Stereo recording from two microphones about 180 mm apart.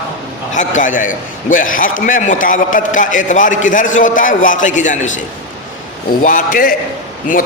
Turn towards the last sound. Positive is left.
turn(degrees=50)  # may be behind; listen again after turning